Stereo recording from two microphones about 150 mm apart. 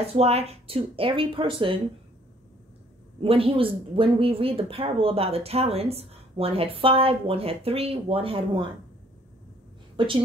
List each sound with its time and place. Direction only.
0.0 s speech: 45° right (ahead or behind)
3.2 s speech: 40° right (ahead or behind)
10.0 s speech: 35° right (ahead or behind)